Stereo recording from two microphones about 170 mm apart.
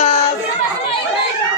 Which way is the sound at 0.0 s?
40° left (ahead or behind).